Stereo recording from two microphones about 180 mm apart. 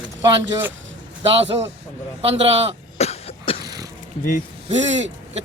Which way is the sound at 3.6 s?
20° right (ahead or behind).